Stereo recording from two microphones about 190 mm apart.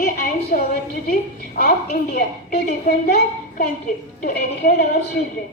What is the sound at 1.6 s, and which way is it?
A woman's voice, 50° left (ahead or behind).